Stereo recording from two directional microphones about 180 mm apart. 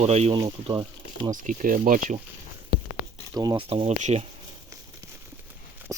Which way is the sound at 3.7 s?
40° right (ahead or behind).